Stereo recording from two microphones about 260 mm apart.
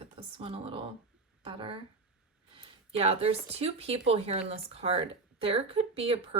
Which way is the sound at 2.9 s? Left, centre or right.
Right.